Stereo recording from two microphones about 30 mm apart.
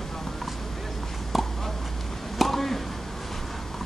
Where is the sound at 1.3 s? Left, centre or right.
Centre.